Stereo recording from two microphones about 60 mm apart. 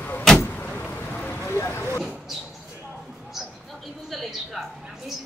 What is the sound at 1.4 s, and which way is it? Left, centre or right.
Vehicle, left.